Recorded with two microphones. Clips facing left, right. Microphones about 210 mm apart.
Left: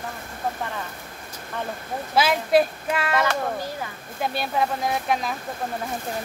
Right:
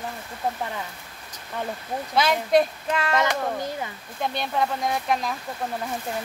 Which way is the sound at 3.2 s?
20° right (ahead or behind).